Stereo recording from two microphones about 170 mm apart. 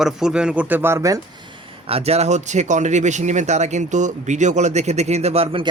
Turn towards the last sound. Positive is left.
turn(degrees=-35)  # may be behind; listen again after turning